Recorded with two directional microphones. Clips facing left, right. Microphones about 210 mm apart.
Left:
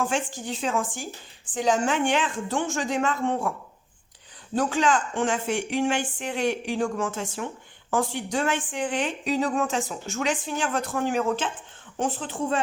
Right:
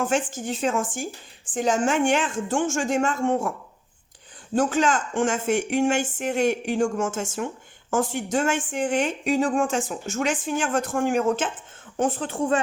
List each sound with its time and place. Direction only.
0.4 s speech: 45° right (ahead or behind)
4.5 s speech: 45° right (ahead or behind)